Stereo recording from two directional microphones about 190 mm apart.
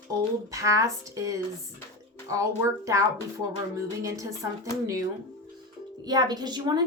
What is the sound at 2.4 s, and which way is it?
A woman's voice, 15° right (ahead or behind).